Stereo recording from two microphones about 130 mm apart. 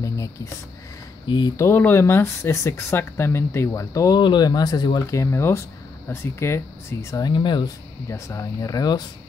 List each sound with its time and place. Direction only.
1.2 s speech: 35° left (ahead or behind)
1.6 s speech: 15° left (ahead or behind); by 5.0 s 35° left (ahead or behind)
5.1 s speech: 20° left (ahead or behind); by 7.7 s 40° left (ahead or behind)
8.1 s speech: 25° left (ahead or behind)